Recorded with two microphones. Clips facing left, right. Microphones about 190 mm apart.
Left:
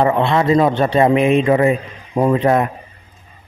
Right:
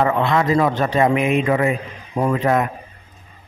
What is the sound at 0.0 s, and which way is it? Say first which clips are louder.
A man's voice: left 3 dB; 25° left (ahead or behind).